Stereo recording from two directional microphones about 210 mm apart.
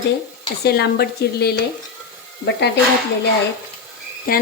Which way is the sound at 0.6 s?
50° left (ahead or behind).